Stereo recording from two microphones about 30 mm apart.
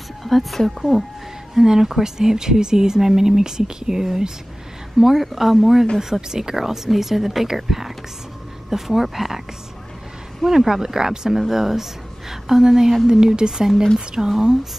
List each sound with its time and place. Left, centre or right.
0.2 s speech: centre
1.5 s speech: centre
5.0 s a woman's voice: centre
10.7 s a woman's voice: centre
13.4 s speech: right